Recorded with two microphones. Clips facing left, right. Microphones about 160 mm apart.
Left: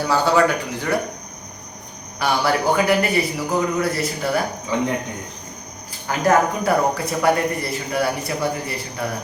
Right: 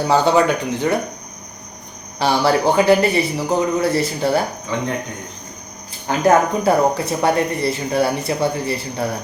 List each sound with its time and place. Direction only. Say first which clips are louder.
0.1 s speech: right 3 dB; 20° right (ahead or behind)
2.1 s speech: right 4 dB; 30° right (ahead or behind)
6.1 s speech: right 3 dB; 25° right (ahead or behind)